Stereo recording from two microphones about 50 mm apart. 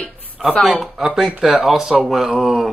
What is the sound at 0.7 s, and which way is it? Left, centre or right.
Speech, centre.